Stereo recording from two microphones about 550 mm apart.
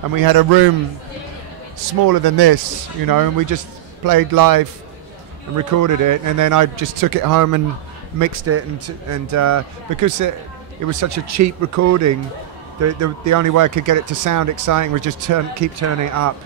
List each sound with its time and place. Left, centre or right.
0.1 s speech: right
2.0 s speech: right